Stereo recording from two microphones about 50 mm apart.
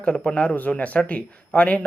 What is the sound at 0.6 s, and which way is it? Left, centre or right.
Speech, left.